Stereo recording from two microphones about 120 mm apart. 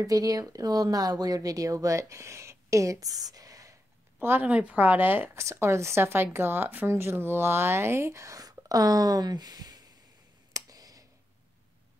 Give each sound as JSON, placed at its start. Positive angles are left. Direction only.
{"t": 0.0, "sound": "speech", "side_deg": -30}
{"t": 4.2, "sound": "speech", "side_deg": -15}
{"t": 10.5, "sound": "clicking", "side_deg": -30}